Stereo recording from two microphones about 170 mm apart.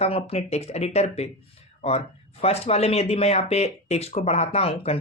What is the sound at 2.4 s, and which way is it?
Speech, 35° left (ahead or behind).